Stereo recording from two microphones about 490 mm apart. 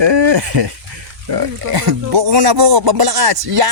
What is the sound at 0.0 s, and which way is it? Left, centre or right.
Speech, right.